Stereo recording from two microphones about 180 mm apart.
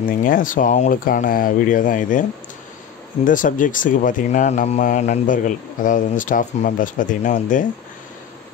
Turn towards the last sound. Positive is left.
turn(degrees=45)  # may be behind; listen again after turning